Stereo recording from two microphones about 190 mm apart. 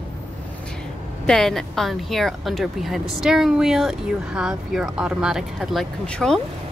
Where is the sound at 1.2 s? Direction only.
Centre (ahead or behind).